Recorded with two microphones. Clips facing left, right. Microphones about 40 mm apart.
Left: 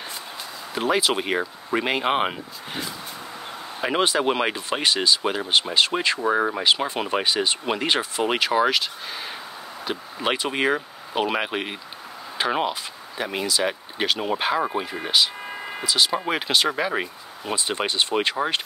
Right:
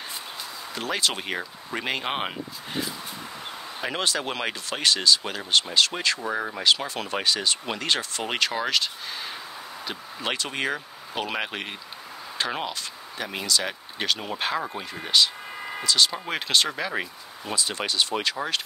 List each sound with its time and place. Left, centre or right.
0.7 s speech: centre